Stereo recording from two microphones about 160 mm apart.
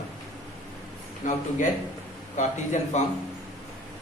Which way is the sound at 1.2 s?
50° left (ahead or behind).